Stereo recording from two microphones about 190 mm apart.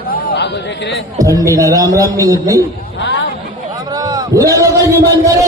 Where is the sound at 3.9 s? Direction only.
20° right (ahead or behind).